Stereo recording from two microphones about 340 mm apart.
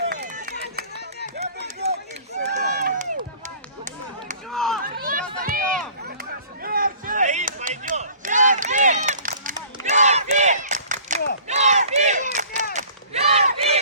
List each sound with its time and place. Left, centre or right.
0.1 s run: right
4.5 s chop: centre
4.8 s run: right
6.6 s a sound: right